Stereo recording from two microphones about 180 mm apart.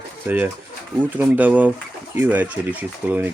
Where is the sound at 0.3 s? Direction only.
10° right (ahead or behind).